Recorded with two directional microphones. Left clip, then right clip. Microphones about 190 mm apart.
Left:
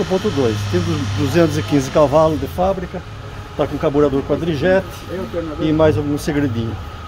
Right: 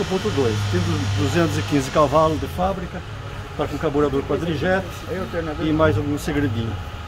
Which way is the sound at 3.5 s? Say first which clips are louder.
Left 5 dB; 30° left (ahead or behind).